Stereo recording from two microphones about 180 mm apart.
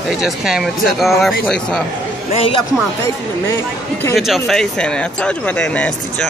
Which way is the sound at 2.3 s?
30° left (ahead or behind).